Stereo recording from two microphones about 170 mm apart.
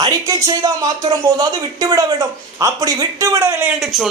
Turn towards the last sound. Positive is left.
turn(degrees=-5)  # may be behind; listen again after turning